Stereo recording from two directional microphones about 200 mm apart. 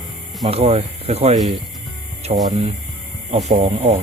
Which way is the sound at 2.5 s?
30° right (ahead or behind).